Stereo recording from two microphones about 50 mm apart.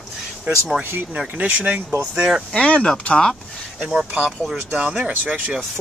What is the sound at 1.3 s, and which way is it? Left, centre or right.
Speech, right.